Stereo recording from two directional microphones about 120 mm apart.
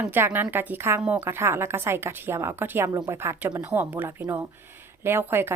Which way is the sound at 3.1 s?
20° right (ahead or behind).